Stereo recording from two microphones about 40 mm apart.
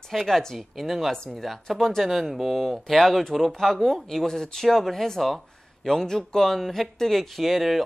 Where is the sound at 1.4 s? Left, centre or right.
Centre.